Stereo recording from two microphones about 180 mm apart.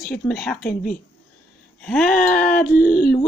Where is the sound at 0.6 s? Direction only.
55° left (ahead or behind).